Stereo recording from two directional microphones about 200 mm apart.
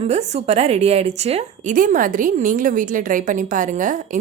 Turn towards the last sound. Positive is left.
turn(degrees=-40)  # may be behind; listen again after turning